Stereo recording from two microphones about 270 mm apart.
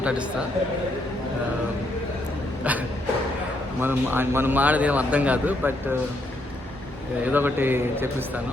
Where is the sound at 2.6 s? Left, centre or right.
Centre.